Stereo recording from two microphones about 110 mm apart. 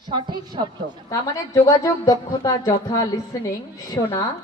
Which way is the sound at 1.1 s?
35° left (ahead or behind).